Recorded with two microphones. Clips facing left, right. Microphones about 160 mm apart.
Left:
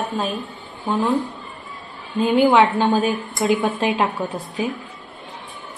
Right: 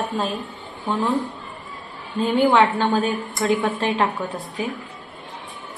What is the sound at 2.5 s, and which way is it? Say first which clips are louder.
A woman's voice: left 2 dB; 15° left (ahead or behind).